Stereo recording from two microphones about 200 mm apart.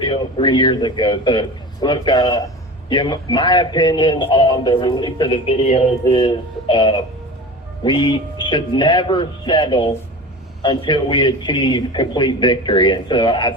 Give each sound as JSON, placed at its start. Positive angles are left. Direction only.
{"t": 0.0, "sound": "a man's voice", "side_deg": 25}